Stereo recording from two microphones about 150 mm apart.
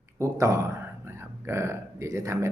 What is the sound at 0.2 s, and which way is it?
Speech, 20° right (ahead or behind).